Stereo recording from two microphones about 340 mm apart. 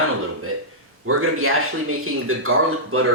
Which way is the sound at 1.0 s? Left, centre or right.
Right.